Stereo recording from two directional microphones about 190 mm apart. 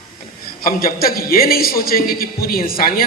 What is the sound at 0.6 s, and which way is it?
A man's voice, 50° left (ahead or behind).